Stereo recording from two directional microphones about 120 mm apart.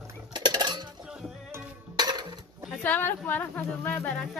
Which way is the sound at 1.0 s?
5° right (ahead or behind).